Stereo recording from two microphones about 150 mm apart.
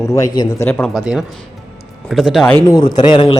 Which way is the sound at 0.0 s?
20° left (ahead or behind).